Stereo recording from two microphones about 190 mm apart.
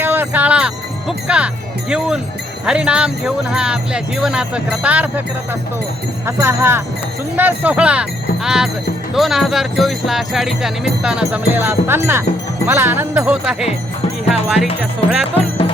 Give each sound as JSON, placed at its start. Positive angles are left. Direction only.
{"t": 0.0, "sound": "music", "side_deg": -10}
{"t": 1.9, "sound": "speech", "side_deg": -5}
{"t": 15.4, "sound": "music", "side_deg": 30}